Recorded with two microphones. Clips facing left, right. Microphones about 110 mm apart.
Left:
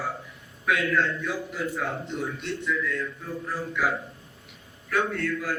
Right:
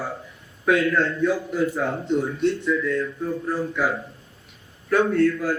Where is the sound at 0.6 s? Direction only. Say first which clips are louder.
Right 5 dB; 35° right (ahead or behind).